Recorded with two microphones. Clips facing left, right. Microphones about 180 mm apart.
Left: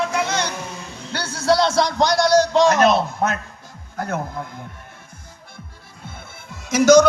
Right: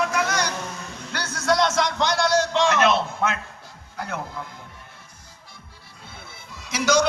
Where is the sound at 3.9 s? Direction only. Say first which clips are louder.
Left 6 dB; 45° left (ahead or behind).